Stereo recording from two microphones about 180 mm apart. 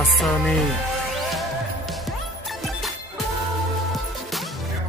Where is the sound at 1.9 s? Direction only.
Centre (ahead or behind).